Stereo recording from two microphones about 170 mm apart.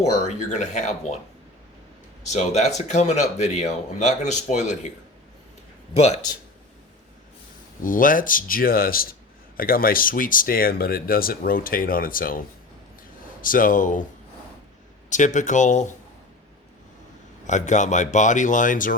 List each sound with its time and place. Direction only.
0.0 s speech: 40° left (ahead or behind)
2.2 s speech: 40° left (ahead or behind)
7.8 s speech: 55° left (ahead or behind)
15.1 s speech: 45° left (ahead or behind)
17.4 s speech: 45° left (ahead or behind)